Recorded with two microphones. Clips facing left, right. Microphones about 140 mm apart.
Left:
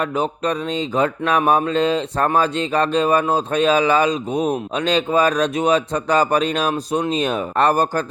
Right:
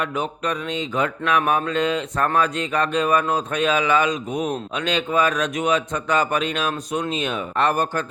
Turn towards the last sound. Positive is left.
turn(degrees=35)  # may be behind; listen again after turning